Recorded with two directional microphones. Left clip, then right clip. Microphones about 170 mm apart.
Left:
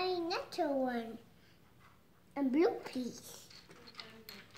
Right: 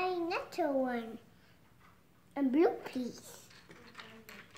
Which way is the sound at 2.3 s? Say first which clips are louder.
Right 2 dB; 5° right (ahead or behind).